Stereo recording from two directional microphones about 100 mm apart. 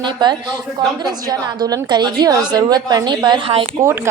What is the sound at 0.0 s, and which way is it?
A woman's voice, 50° right (ahead or behind).